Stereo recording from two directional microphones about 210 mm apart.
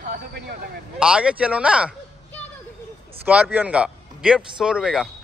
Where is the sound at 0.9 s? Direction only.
5° right (ahead or behind).